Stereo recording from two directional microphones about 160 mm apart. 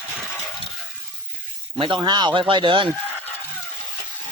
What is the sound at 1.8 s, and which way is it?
Speech, 30° right (ahead or behind).